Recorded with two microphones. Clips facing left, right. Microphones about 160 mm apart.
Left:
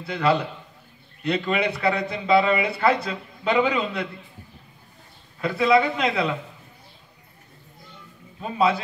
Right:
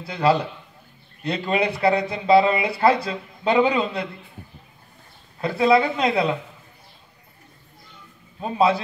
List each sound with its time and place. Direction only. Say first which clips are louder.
0.0 s speech: right 2 dB; 30° right (ahead or behind)
5.4 s speech: right 1 dB; 30° right (ahead or behind)
8.4 s speech: right 2 dB; 35° right (ahead or behind)